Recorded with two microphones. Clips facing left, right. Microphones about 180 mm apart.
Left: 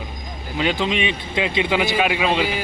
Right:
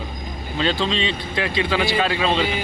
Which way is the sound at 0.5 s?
15° left (ahead or behind).